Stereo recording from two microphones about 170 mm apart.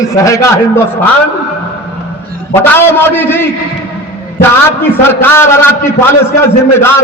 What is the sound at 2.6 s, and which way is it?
Speech, 15° left (ahead or behind).